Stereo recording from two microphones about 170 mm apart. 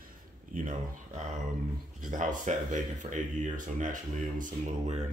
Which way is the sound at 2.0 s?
50° right (ahead or behind).